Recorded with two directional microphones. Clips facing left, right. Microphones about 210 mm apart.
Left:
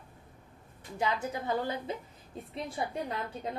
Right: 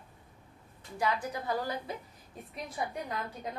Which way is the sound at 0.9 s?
25° left (ahead or behind).